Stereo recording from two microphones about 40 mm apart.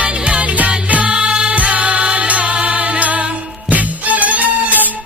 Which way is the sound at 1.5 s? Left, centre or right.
Right.